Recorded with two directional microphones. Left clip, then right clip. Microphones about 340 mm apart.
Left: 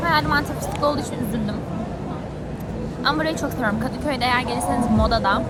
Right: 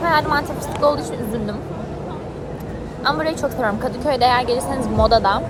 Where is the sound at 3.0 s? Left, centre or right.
Centre.